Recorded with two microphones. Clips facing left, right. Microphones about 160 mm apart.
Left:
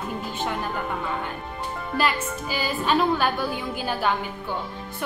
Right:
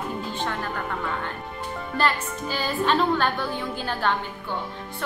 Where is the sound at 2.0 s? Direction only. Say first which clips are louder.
Even; 10° left (ahead or behind).